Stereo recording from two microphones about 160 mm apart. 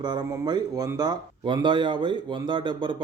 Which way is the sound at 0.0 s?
25° right (ahead or behind).